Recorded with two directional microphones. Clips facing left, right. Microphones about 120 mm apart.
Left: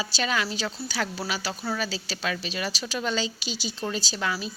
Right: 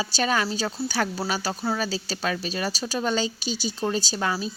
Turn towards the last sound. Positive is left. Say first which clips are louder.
# right 4 dB
turn(degrees=-35)  # may be behind; listen again after turning